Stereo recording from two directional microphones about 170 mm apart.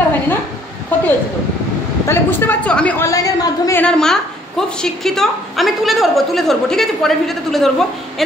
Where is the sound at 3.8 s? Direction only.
5° left (ahead or behind).